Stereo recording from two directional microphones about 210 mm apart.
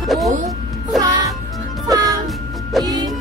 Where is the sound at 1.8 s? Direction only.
15° right (ahead or behind).